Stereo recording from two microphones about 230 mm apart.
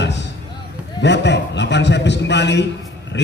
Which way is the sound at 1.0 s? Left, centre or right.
Left.